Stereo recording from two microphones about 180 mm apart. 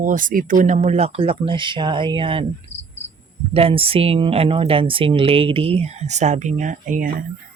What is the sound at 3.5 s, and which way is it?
Speech, 30° right (ahead or behind).